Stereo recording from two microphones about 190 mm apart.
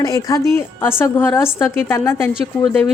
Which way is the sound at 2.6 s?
Centre (ahead or behind).